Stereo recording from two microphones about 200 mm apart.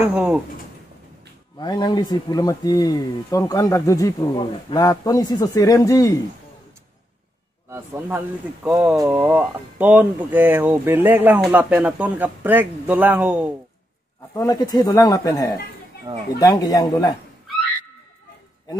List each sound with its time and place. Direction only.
0.0 s speech: 5° right (ahead or behind)
1.6 s speech: 20° left (ahead or behind)
7.7 s speech: 10° right (ahead or behind)
14.3 s speech: 20° left (ahead or behind)